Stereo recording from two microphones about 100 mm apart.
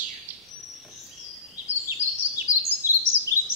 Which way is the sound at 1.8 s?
20° right (ahead or behind).